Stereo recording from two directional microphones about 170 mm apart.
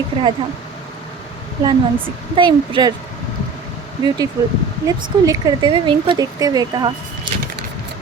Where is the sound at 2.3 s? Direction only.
25° right (ahead or behind).